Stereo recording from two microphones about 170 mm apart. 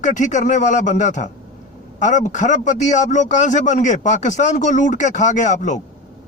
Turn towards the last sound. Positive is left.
turn(degrees=45)  # may be behind; listen again after turning